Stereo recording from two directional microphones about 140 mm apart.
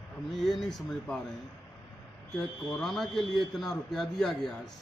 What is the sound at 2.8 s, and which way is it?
Speech, centre (ahead or behind).